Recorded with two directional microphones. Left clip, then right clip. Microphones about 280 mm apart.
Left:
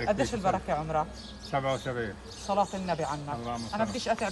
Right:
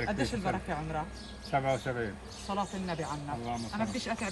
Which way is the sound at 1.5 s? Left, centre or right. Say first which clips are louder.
Left 1 dB; centre.